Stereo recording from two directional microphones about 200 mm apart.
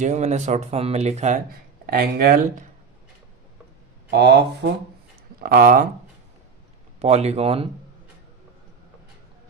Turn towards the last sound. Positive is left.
turn(degrees=-30)  # may be behind; listen again after turning